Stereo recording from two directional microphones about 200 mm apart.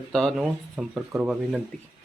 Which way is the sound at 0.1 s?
Centre (ahead or behind).